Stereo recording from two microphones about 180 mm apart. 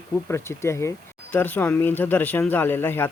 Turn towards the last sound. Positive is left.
turn(degrees=10)  # may be behind; listen again after turning